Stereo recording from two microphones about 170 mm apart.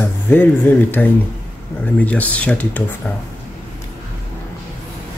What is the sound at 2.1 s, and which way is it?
Speech, 10° left (ahead or behind).